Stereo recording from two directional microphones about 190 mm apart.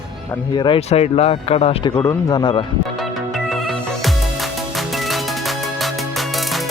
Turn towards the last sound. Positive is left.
turn(degrees=0)  # may be behind; listen again after turning